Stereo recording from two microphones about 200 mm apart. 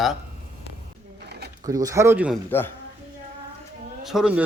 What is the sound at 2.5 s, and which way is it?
Speech, 10° left (ahead or behind).